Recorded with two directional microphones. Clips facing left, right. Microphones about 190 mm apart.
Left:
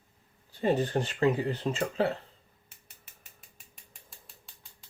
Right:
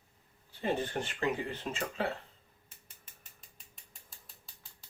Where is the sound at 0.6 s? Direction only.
40° left (ahead or behind).